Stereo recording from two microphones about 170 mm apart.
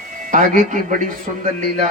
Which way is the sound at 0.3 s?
50° right (ahead or behind).